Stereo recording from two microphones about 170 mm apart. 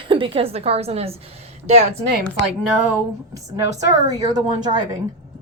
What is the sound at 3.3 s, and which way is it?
A woman's voice, 20° right (ahead or behind).